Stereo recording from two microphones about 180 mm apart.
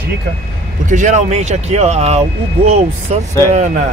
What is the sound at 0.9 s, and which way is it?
Speech, 45° right (ahead or behind).